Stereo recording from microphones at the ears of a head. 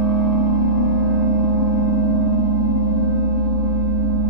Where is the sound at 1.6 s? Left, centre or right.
Right.